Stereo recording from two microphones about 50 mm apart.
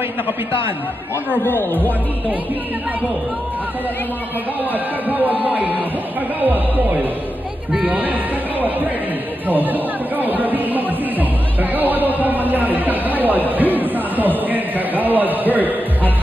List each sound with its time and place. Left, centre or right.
1.4 s speech: left
5.0 s speech: right